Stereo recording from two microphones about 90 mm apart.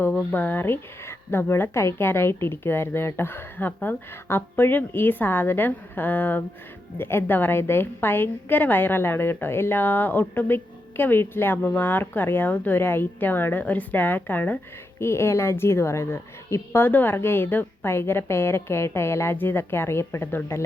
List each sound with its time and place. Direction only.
0.1 s speech: centre (ahead or behind)
0.3 s a woman's voice: 20° left (ahead or behind)